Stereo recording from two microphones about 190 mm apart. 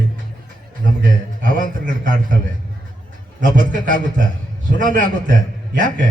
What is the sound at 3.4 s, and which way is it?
A man's voice, 45° right (ahead or behind).